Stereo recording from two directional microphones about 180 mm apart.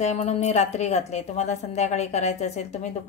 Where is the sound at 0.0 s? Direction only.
40° left (ahead or behind).